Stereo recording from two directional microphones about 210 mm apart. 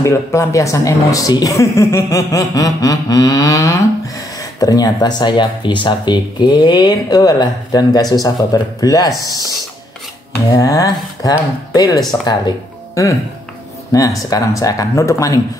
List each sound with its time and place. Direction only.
0.0 s speech: 15° left (ahead or behind)
10.5 s speech: 15° left (ahead or behind)